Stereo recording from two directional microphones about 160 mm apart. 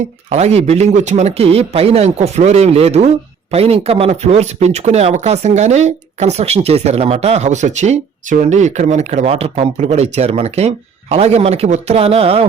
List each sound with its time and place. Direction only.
0.3 s speech: 40° right (ahead or behind)